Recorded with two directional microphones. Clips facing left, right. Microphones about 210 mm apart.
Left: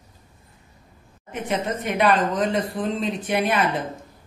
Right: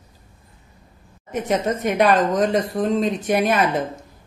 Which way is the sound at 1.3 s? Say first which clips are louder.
Right 4 dB; 40° right (ahead or behind).